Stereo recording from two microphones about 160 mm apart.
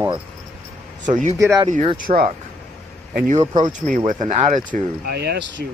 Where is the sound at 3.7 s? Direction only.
55° right (ahead or behind).